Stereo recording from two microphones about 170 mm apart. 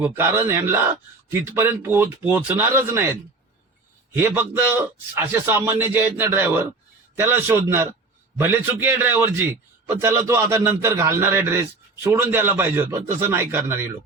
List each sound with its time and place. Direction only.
0.0 s a man's voice: 15° right (ahead or behind)
4.2 s a man's voice: 15° right (ahead or behind)